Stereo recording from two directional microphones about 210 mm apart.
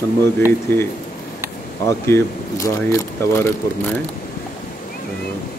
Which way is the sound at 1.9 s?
10° left (ahead or behind).